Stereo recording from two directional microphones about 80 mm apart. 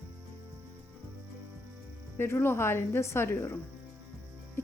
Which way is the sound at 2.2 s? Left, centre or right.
Left.